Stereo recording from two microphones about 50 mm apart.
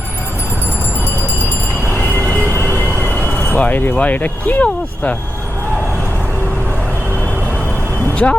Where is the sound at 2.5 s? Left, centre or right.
Left.